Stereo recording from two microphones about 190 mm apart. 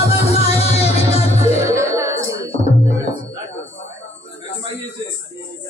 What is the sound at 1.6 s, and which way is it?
Music, 15° right (ahead or behind).